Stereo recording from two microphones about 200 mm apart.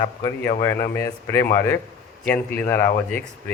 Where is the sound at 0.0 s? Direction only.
15° left (ahead or behind).